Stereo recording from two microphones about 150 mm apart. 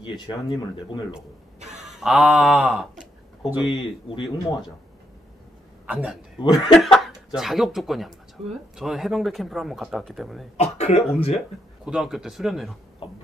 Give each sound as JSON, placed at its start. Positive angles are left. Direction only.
{"t": 0.0, "sound": "speech", "side_deg": 30}
{"t": 2.0, "sound": "speech", "side_deg": 0}
{"t": 3.7, "sound": "speech", "side_deg": 30}
{"t": 5.9, "sound": "a man's voice", "side_deg": -10}
{"t": 6.5, "sound": "speech", "side_deg": 0}
{"t": 10.6, "sound": "speech", "side_deg": 45}
{"t": 11.8, "sound": "speech", "side_deg": 0}
{"t": 13.0, "sound": "a sound", "side_deg": 35}